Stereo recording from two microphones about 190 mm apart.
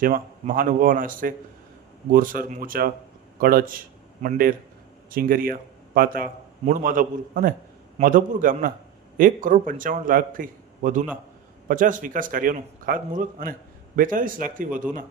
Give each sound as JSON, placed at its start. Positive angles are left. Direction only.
{"t": 0.0, "sound": "a man's voice", "side_deg": -50}